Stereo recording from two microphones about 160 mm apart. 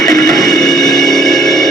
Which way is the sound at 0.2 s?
Centre (ahead or behind).